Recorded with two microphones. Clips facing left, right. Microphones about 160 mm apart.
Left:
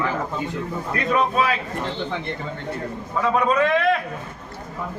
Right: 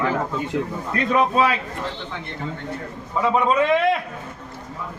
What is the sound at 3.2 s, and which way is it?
Speech, 20° right (ahead or behind).